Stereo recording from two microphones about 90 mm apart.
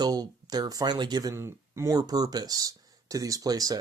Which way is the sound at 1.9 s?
45° right (ahead or behind).